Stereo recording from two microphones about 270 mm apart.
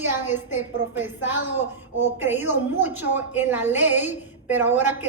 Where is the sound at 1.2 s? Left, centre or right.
Left.